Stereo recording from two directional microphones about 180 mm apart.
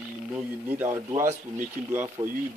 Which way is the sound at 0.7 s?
10° right (ahead or behind).